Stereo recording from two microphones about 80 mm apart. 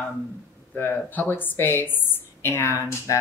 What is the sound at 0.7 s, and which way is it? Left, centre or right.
A woman's voice, left.